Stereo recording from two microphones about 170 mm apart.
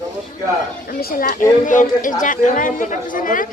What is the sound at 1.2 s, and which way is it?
A man's voice, 55° left (ahead or behind).